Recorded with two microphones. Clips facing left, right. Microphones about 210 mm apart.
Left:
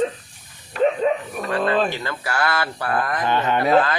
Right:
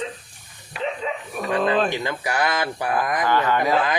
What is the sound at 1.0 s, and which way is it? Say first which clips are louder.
Dog: left 8 dB; 50° left (ahead or behind).